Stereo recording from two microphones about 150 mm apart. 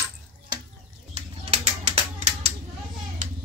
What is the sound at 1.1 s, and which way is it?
Bird, 45° right (ahead or behind).